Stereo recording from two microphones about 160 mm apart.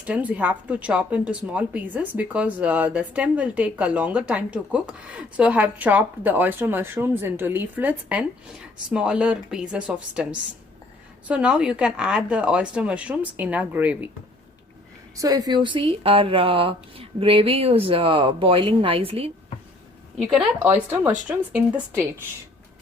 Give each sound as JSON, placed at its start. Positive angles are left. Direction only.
{"t": 0.0, "sound": "speech", "side_deg": -10}
{"t": 11.3, "sound": "speech", "side_deg": -5}
{"t": 15.1, "sound": "speech", "side_deg": -20}
{"t": 20.2, "sound": "speech", "side_deg": -10}